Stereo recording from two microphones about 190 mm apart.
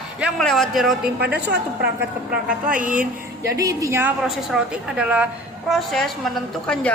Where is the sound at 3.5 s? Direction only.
15° right (ahead or behind).